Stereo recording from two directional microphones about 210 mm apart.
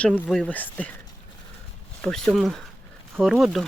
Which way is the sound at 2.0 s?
5° left (ahead or behind).